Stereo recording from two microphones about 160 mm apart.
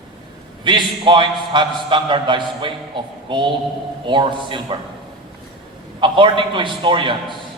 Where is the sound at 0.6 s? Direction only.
30° right (ahead or behind).